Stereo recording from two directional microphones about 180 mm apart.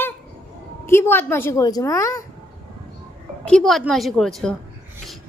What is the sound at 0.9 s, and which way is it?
A woman's voice, 15° left (ahead or behind).